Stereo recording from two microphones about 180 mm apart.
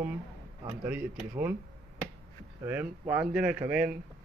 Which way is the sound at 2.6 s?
10° right (ahead or behind).